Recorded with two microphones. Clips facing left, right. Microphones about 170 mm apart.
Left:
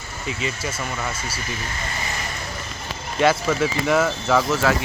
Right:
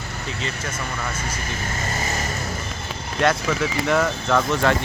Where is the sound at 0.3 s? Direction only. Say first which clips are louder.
Left 4 dB; 10° left (ahead or behind).